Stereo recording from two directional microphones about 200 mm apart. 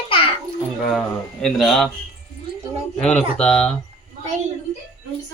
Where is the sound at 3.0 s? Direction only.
5° left (ahead or behind).